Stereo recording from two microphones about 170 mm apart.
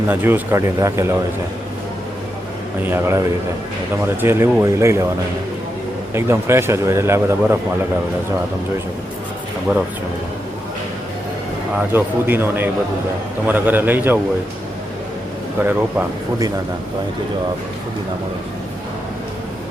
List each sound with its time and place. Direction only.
0.1 s a man's voice: 10° right (ahead or behind)
2.8 s a man's voice: 15° right (ahead or behind)
6.1 s a man's voice: 15° right (ahead or behind)
11.8 s a man's voice: 10° right (ahead or behind)
15.5 s a man's voice: 10° right (ahead or behind)